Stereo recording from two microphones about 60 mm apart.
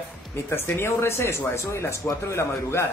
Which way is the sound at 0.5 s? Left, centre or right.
Left.